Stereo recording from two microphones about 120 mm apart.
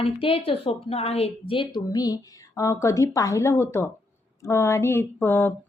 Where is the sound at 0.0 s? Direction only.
50° left (ahead or behind).